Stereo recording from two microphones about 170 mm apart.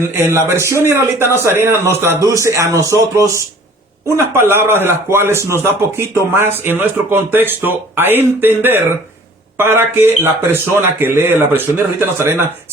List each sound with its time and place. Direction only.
0.1 s speech: 15° right (ahead or behind)
4.4 s speech: 15° right (ahead or behind)